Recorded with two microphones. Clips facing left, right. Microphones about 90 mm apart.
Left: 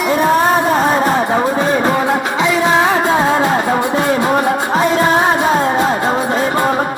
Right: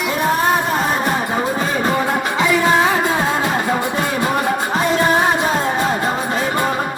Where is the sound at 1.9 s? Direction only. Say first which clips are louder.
Left 3 dB; 25° left (ahead or behind).